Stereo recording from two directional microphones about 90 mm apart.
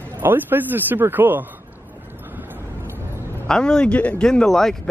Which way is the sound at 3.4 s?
10° left (ahead or behind).